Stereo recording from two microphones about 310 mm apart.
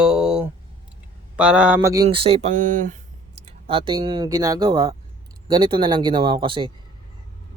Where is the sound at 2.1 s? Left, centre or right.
Centre.